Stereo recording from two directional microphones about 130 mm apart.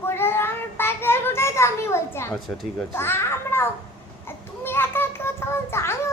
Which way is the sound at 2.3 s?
5° left (ahead or behind).